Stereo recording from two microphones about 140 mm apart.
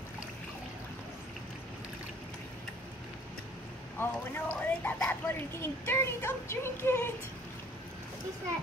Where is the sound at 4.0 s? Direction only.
15° left (ahead or behind).